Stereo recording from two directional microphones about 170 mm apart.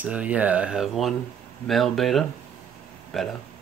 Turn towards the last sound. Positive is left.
turn(degrees=0)  # may be behind; listen again after turning